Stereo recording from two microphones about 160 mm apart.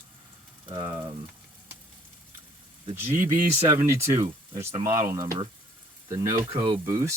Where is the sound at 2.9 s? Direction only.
15° right (ahead or behind).